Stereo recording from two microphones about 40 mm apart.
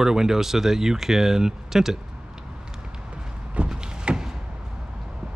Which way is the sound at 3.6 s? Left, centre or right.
Right.